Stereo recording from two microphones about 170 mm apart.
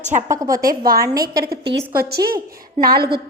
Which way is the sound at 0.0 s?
45° right (ahead or behind).